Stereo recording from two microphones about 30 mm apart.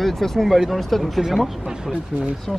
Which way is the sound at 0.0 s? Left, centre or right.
Centre.